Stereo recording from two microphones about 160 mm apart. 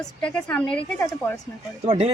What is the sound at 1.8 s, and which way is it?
Speech, 40° right (ahead or behind).